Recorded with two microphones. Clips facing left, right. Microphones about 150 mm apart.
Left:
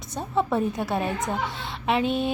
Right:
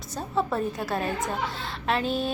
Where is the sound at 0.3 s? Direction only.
Centre (ahead or behind).